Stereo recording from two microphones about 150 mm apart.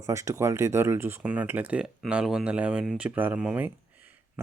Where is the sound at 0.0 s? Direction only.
20° right (ahead or behind).